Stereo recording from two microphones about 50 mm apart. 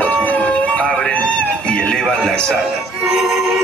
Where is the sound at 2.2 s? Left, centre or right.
Centre.